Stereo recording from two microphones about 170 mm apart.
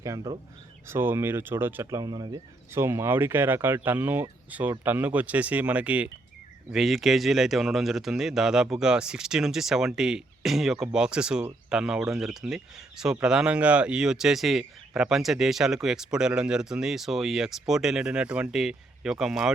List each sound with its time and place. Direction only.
0.0 s speech: 20° right (ahead or behind); by 19.5 s centre (ahead or behind)